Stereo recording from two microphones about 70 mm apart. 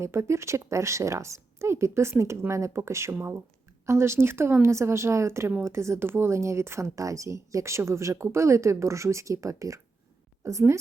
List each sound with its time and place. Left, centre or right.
0.0 s a woman's voice: right